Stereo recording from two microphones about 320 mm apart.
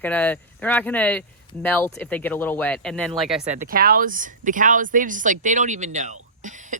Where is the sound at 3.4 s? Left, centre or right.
Right.